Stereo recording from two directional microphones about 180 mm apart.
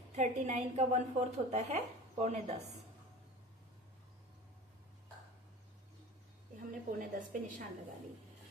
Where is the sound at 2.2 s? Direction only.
40° right (ahead or behind).